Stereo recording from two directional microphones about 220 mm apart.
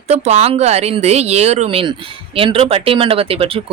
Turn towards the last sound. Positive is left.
turn(degrees=-25)  # may be behind; listen again after turning